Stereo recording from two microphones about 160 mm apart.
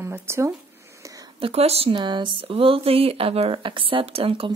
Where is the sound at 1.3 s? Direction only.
40° right (ahead or behind).